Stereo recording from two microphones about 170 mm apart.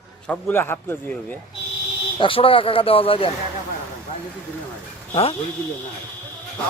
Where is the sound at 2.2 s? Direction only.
30° left (ahead or behind).